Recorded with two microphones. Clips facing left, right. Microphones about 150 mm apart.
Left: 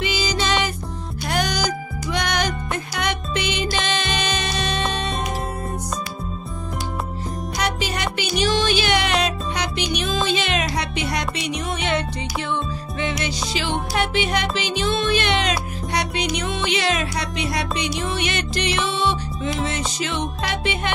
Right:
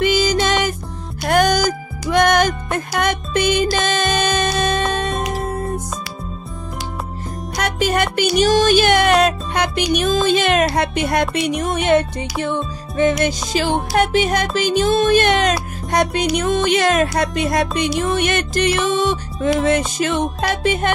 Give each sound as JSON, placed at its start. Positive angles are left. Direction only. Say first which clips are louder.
{"t": 0.0, "sound": "music", "louder": "right 7 dB", "side_deg": -50}
{"t": 7.5, "sound": "music", "louder": "right 7 dB", "side_deg": -50}
{"t": 10.6, "sound": "music", "louder": "right 7 dB", "side_deg": -60}
{"t": 19.5, "sound": "music", "louder": "right 11 dB", "side_deg": -55}
{"t": 20.0, "sound": "music", "louder": "right 6 dB", "side_deg": -45}